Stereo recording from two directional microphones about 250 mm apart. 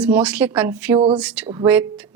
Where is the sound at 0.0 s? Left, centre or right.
Centre.